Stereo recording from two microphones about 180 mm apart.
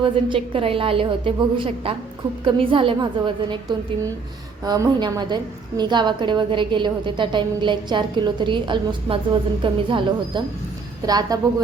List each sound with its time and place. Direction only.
0.0 s a woman's voice: 30° right (ahead or behind)